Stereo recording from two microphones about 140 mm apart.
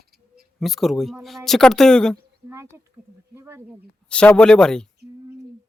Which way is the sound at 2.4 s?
20° right (ahead or behind).